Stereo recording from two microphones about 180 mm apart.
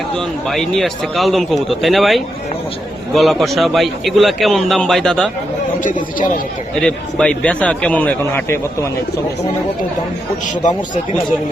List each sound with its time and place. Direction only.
0.2 s a man's voice: centre (ahead or behind)
5.8 s speech: 45° left (ahead or behind)
6.7 s a man's voice: 5° left (ahead or behind)
10.5 s speech: 45° left (ahead or behind)